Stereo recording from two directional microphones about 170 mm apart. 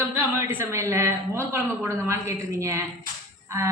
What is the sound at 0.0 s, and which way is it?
A woman's voice, 15° right (ahead or behind).